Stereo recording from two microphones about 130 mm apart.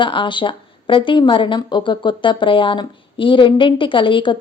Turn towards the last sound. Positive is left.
turn(degrees=40)  # may be behind; listen again after turning